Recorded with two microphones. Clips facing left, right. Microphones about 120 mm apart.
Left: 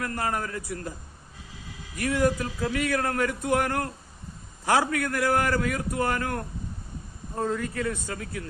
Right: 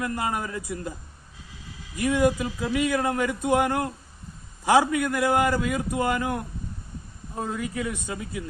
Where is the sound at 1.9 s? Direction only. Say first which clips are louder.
Right 2 dB; 20° right (ahead or behind).